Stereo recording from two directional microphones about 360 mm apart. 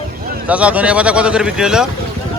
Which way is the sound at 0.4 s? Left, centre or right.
Centre.